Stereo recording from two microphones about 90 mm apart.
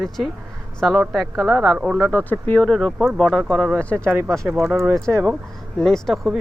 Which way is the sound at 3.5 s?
5° left (ahead or behind).